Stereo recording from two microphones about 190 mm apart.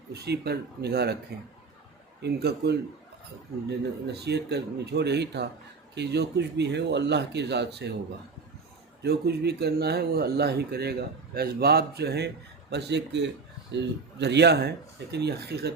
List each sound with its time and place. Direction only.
0.1 s speech: 60° right (ahead or behind)
9.0 s speech: 60° right (ahead or behind)